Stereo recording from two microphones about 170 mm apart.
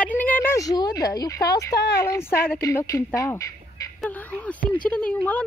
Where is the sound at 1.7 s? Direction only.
80° left.